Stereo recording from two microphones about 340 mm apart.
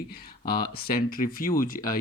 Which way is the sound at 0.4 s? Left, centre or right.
Left.